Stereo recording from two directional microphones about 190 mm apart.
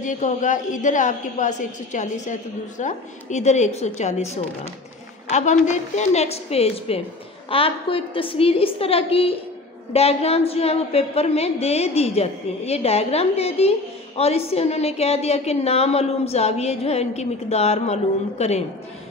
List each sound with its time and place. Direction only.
0.0 s a woman's voice: 40° left (ahead or behind)
5.3 s a woman's voice: 40° left (ahead or behind)